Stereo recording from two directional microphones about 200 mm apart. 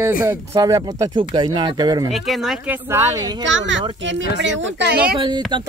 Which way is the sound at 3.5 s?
65° right (ahead or behind).